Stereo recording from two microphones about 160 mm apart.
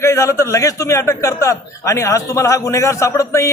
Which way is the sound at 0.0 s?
20° left (ahead or behind).